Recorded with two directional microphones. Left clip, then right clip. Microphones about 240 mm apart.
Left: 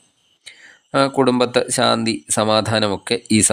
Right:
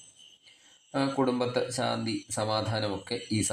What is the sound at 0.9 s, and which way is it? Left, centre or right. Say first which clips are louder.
Speech: left 12 dB; left.